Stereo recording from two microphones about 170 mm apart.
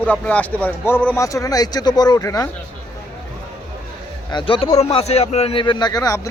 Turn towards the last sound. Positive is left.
turn(degrees=20)  # may be behind; listen again after turning